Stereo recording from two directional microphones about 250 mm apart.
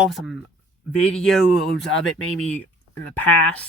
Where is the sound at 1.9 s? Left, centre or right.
Left.